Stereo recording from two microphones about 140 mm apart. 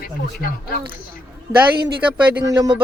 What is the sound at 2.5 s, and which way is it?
Speech, 25° right (ahead or behind).